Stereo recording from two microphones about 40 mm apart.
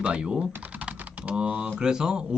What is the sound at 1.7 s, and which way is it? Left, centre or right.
Speech, centre.